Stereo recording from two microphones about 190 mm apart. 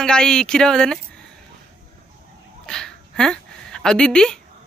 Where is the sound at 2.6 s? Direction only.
5° left (ahead or behind).